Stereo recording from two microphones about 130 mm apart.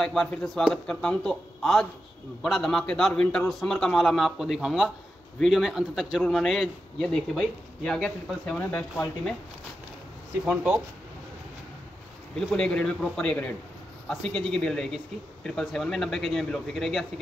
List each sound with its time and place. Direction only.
0.0 s a man's voice: 5° left (ahead or behind)
10.4 s speech: 5° right (ahead or behind)
12.4 s a man's voice: 5° left (ahead or behind)